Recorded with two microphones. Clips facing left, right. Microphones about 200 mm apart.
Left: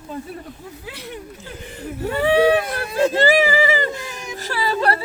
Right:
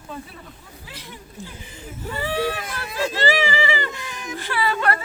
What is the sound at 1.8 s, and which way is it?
Whimper, 65° left (ahead or behind).